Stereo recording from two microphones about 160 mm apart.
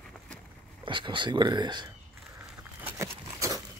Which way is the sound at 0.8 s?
30° right (ahead or behind).